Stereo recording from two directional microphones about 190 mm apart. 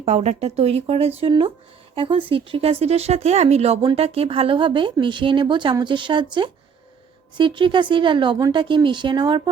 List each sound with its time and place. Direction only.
0.0 s speech: 35° right (ahead or behind)
7.3 s speech: 25° right (ahead or behind)